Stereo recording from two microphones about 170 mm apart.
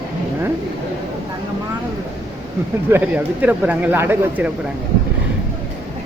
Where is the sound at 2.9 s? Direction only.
10° right (ahead or behind).